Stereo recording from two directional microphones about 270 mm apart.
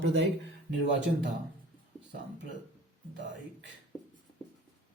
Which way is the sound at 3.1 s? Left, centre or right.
Right.